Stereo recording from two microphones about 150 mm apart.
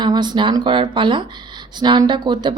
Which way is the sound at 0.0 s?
30° right (ahead or behind).